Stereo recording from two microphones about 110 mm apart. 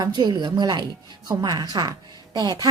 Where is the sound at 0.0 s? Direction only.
40° right (ahead or behind).